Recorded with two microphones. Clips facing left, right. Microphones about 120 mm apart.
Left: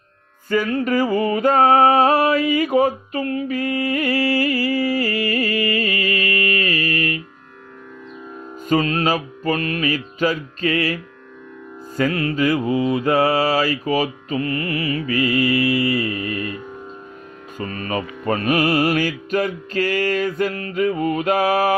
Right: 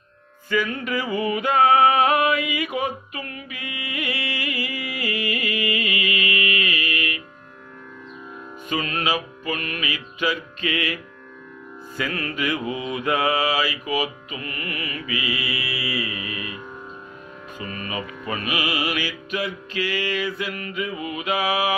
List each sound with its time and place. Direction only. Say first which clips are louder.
0.5 s music: left 5 dB; 40° left (ahead or behind)
8.6 s mantra: left 7 dB; 35° left (ahead or behind)
12.1 s mantra: left 6 dB; 30° left (ahead or behind)
15.0 s music: left 10 dB; 45° left (ahead or behind)
17.6 s music: left 6 dB; 40° left (ahead or behind)